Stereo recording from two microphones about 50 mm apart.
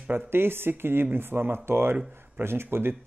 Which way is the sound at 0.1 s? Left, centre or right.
Right.